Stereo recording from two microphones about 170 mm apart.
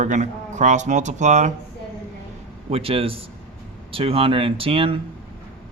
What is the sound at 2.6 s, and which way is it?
Speech, 35° right (ahead or behind).